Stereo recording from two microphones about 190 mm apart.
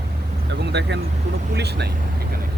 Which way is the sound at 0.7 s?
65° right (ahead or behind).